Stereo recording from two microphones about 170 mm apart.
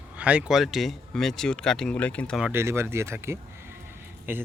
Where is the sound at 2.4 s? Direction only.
15° right (ahead or behind).